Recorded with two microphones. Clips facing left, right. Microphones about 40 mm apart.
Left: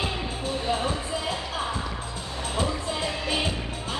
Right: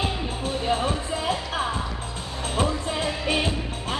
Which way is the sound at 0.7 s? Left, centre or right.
Right.